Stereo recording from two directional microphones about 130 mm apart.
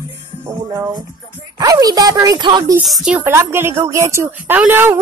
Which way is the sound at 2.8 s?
5° right (ahead or behind).